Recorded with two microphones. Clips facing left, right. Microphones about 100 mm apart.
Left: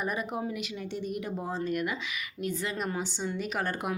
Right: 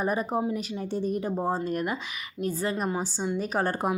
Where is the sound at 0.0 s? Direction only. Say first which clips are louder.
Right 5 dB; 35° right (ahead or behind).